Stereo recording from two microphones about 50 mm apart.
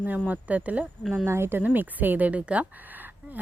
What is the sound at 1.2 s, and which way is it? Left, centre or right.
Speech, right.